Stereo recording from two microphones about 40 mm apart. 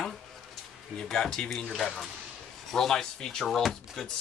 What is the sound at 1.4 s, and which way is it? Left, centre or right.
Speech, left.